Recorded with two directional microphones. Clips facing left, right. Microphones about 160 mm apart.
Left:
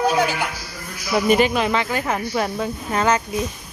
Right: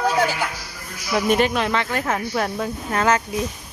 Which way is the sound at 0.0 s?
15° left (ahead or behind).